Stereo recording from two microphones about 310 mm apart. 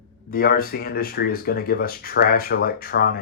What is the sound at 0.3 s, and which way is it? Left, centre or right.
Speech, left.